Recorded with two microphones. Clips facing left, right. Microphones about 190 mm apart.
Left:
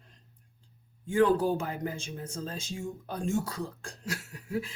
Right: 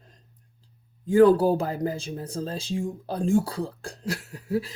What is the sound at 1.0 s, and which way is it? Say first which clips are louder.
Speech: right 7 dB; 35° right (ahead or behind).